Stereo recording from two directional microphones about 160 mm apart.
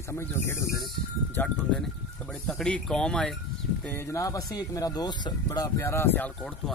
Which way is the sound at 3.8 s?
15° left (ahead or behind).